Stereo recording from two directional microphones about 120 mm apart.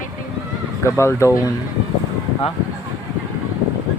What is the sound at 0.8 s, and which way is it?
Speech, 25° left (ahead or behind).